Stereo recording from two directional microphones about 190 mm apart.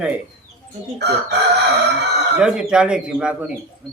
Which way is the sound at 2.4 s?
5° right (ahead or behind).